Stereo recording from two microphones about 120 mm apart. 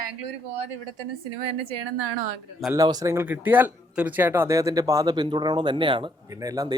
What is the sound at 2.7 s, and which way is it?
Speech, 30° right (ahead or behind).